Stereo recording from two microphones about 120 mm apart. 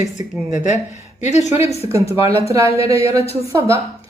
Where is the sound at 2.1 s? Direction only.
25° right (ahead or behind).